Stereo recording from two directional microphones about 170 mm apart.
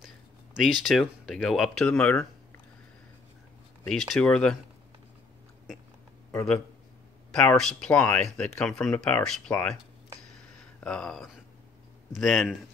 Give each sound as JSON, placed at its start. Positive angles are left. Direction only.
{"t": 0.6, "sound": "speech", "side_deg": 0}
{"t": 3.8, "sound": "speech", "side_deg": 0}
{"t": 6.3, "sound": "speech", "side_deg": 5}
{"t": 10.4, "sound": "a sound", "side_deg": 5}
{"t": 12.1, "sound": "speech", "side_deg": 0}